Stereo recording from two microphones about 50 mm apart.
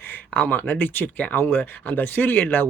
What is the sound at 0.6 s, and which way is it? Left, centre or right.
Speech, left.